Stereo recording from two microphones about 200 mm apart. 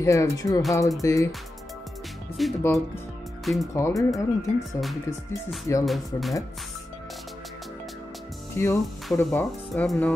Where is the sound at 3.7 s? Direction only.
15° left (ahead or behind).